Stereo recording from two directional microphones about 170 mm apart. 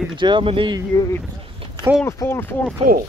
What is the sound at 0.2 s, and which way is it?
Speech, 30° right (ahead or behind).